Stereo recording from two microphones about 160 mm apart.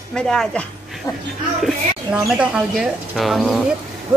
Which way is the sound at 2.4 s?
5° right (ahead or behind).